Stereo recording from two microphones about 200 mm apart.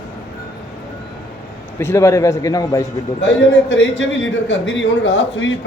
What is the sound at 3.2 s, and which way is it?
A man's voice, 65° left (ahead or behind).